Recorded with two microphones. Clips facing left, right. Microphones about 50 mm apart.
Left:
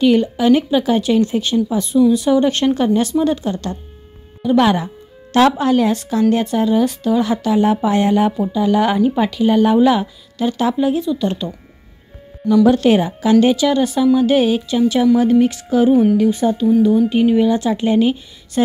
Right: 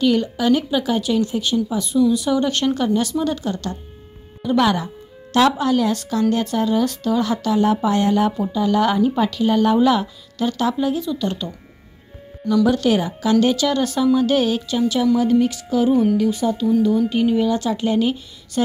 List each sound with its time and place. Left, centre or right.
0.0 s a woman's voice: left
5.3 s speech: left
12.6 s speech: left; by 14.9 s centre
15.1 s a woman's voice: left
15.9 s speech: left
16.2 s a woman's voice: left
16.6 s speech: centre